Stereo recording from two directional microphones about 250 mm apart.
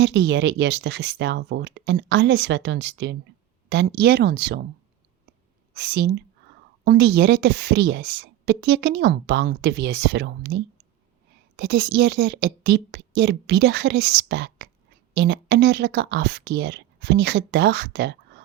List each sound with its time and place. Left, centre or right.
0.0 s speech: right
5.7 s speech: right